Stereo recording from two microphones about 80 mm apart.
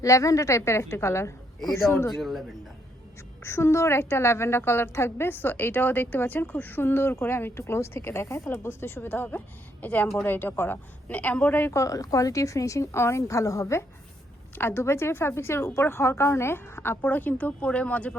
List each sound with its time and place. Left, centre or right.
0.0 s a woman's voice: left
2.1 s a man's voice: centre
3.4 s a woman's voice: left; by 18.2 s centre